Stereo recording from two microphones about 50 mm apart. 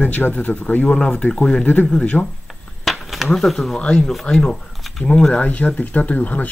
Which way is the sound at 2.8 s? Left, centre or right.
Centre.